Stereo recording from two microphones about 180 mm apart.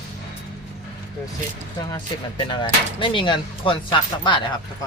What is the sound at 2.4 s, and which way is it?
Speech, 25° left (ahead or behind).